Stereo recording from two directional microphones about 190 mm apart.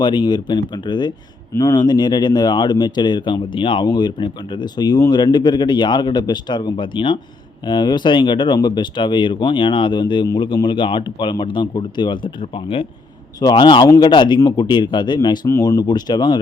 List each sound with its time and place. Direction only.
0.0 s speech: 20° left (ahead or behind)